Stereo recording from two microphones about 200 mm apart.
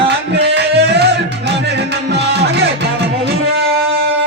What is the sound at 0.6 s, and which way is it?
Music, 55° right (ahead or behind).